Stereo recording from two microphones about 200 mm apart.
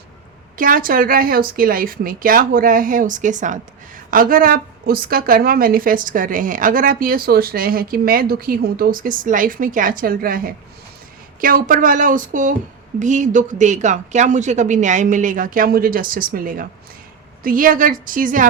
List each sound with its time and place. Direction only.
0.5 s a woman's voice: 45° right (ahead or behind)